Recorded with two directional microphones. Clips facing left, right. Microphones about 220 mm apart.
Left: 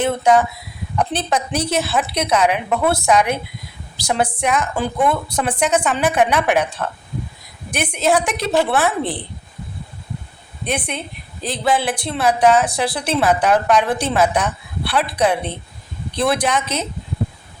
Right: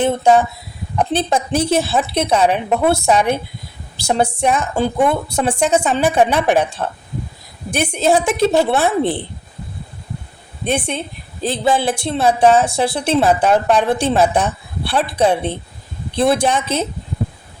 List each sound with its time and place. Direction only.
0.0 s speech: 25° right (ahead or behind)
10.7 s speech: 30° right (ahead or behind)